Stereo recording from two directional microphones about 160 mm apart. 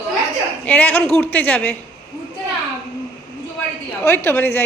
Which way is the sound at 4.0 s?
15° left (ahead or behind).